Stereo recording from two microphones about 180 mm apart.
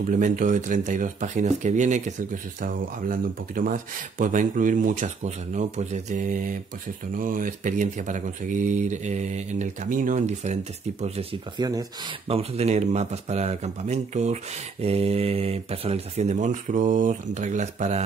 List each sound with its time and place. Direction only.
0.0 s speech: 45° right (ahead or behind)